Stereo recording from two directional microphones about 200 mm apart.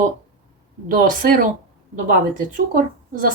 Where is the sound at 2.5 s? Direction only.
40° right (ahead or behind).